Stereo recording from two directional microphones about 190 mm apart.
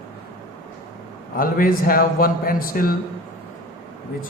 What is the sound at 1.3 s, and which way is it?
A man's voice, 50° left (ahead or behind).